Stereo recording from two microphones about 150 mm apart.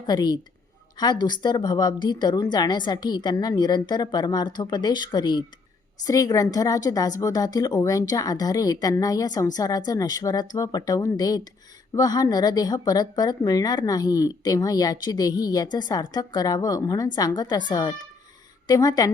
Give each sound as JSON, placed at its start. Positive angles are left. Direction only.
{"t": 0.0, "sound": "a woman's voice", "side_deg": 30}